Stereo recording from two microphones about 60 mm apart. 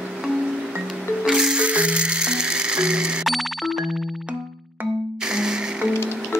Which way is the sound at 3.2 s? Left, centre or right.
Centre.